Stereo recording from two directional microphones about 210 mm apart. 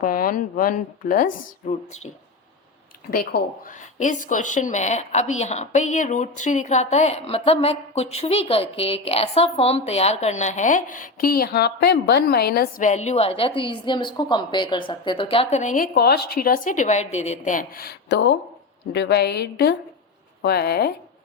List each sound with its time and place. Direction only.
0.0 s a woman's voice: 40° left (ahead or behind)
3.1 s a woman's voice: 45° left (ahead or behind)